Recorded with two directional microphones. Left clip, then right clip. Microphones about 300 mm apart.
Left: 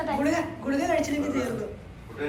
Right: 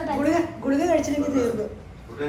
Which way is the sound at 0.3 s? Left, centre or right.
Right.